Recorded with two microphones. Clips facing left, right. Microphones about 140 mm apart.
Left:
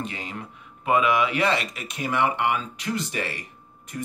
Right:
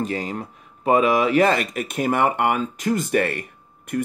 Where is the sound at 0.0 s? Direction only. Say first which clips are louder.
Right 8 dB; 40° right (ahead or behind).